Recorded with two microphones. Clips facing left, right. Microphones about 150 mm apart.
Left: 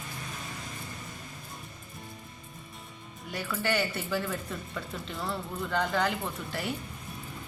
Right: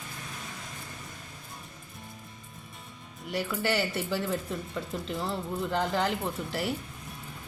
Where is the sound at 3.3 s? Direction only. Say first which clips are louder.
Right 1 dB; 15° right (ahead or behind).